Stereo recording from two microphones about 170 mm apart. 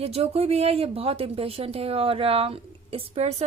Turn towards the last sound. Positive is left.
turn(degrees=-40)  # may be behind; listen again after turning